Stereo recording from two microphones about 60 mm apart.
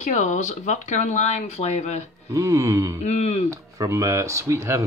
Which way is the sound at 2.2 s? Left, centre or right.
Right.